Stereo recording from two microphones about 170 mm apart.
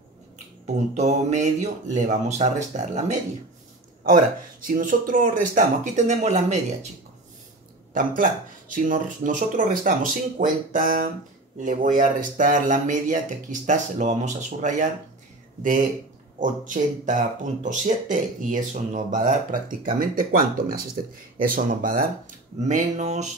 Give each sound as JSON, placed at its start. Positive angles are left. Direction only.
{"t": 0.9, "sound": "speech", "side_deg": -45}
{"t": 4.6, "sound": "speech", "side_deg": -50}
{"t": 7.9, "sound": "speech", "side_deg": -50}
{"t": 16.3, "sound": "speech", "side_deg": -50}